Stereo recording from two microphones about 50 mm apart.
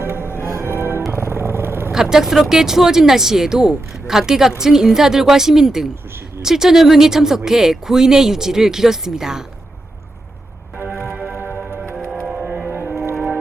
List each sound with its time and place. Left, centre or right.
0.0 s music: right
1.1 s vehicle: right
1.9 s speech: centre
10.9 s music: right
11.3 s music: right
12.2 s music: centre